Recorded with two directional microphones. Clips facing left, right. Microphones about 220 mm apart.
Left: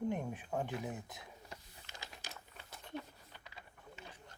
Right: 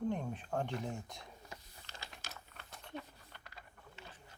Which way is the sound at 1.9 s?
15° left (ahead or behind).